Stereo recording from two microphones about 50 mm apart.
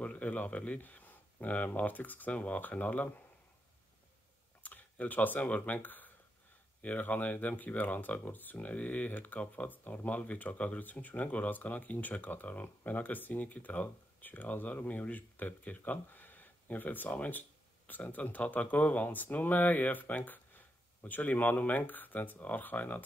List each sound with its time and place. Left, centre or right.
0.0 s speech: left
4.6 s speech: left